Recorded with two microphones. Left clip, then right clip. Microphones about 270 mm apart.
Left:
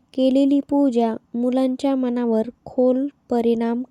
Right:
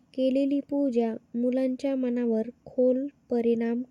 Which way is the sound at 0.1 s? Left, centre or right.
Left.